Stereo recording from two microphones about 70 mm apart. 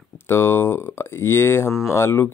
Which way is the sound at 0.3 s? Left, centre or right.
Left.